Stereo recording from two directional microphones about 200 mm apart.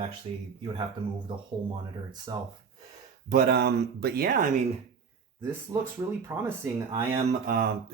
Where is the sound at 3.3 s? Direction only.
55° right (ahead or behind).